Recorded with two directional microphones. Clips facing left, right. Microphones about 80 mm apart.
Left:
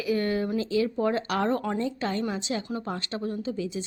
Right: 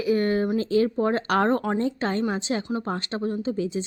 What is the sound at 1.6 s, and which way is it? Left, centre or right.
Speech, right.